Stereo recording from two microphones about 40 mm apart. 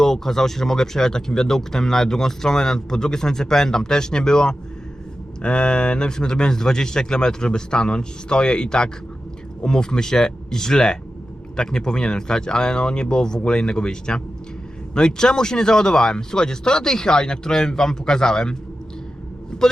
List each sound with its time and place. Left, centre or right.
0.0 s speech: centre